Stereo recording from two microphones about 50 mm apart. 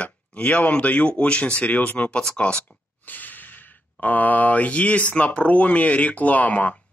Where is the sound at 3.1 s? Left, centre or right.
Left.